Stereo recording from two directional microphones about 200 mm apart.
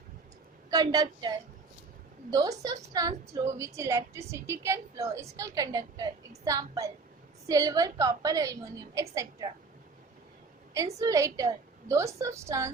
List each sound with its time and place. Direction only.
0.7 s a woman's voice: 20° right (ahead or behind)
2.3 s a woman's voice: 20° right (ahead or behind)
10.9 s a woman's voice: 15° right (ahead or behind)